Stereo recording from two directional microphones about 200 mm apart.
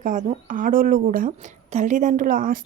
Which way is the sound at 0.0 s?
40° right (ahead or behind).